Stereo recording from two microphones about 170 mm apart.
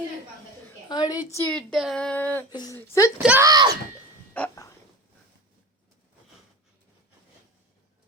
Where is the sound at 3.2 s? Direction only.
15° right (ahead or behind).